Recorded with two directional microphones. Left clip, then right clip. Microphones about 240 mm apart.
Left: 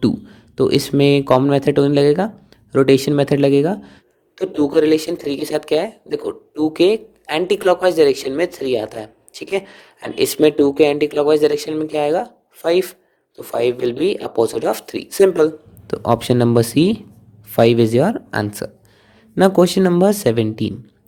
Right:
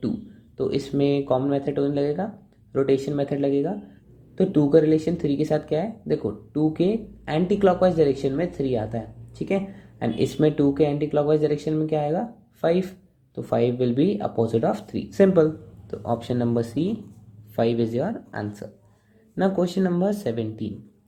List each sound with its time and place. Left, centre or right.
0.5 s speech: left
10.2 s speech: left